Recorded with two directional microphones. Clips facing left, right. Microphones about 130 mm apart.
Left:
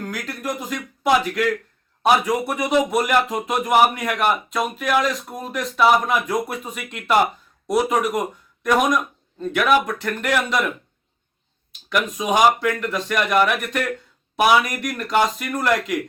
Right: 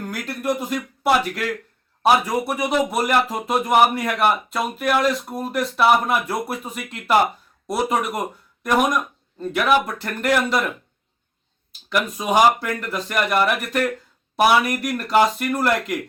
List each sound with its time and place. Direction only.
0.0 s speech: 5° right (ahead or behind)
9.4 s speech: 5° right (ahead or behind)
11.9 s speech: centre (ahead or behind)